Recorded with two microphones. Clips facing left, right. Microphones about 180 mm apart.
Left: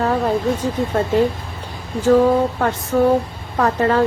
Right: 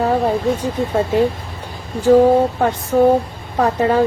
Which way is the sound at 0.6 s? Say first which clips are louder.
Right 1 dB; 10° right (ahead or behind).